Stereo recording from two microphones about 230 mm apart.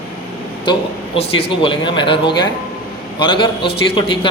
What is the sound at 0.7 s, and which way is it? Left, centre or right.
A man's voice, left.